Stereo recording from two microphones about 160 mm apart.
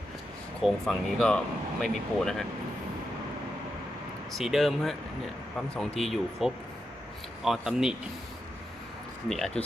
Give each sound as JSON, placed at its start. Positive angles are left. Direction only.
{"t": 0.6, "sound": "speech", "side_deg": 0}
{"t": 4.4, "sound": "speech", "side_deg": 0}
{"t": 9.3, "sound": "speech", "side_deg": 0}